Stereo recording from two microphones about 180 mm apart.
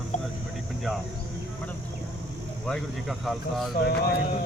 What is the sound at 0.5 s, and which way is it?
Speech, centre (ahead or behind).